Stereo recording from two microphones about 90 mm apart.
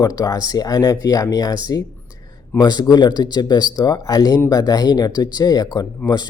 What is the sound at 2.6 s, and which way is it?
Speech, 50° left (ahead or behind).